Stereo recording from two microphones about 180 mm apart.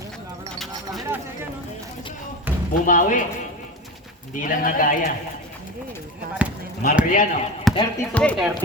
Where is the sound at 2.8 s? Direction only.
45° left (ahead or behind).